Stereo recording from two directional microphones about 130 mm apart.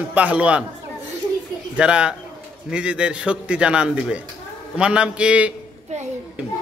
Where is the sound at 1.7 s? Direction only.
10° right (ahead or behind).